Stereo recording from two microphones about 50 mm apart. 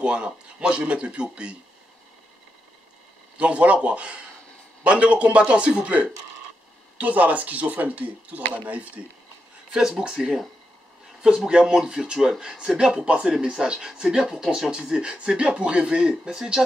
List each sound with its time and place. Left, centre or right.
0.0 s speech: right
3.3 s speech: right
9.7 s speech: centre